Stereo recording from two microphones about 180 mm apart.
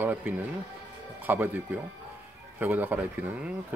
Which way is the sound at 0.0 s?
10° right (ahead or behind).